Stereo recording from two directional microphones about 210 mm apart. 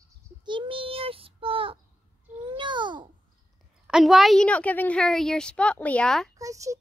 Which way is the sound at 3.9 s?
Centre (ahead or behind).